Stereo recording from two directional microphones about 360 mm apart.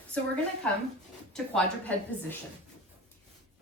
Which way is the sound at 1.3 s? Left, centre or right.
Centre.